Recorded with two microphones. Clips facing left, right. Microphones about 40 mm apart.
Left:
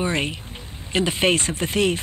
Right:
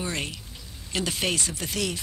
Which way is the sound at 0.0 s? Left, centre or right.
Left.